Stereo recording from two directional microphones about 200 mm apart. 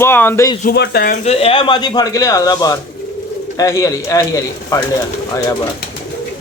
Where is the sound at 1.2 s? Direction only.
30° left (ahead or behind).